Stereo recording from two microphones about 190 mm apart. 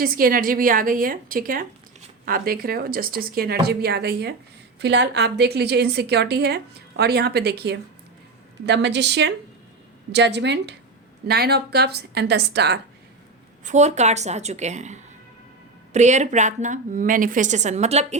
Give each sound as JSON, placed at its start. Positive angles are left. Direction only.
{"t": 0.0, "sound": "a woman's voice", "side_deg": -50}
{"t": 13.7, "sound": "a woman's voice", "side_deg": -35}